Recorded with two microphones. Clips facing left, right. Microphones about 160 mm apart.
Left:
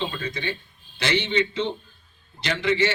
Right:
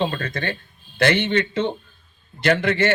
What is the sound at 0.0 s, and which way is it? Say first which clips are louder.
A man's voice: right 5 dB; 55° right (ahead or behind).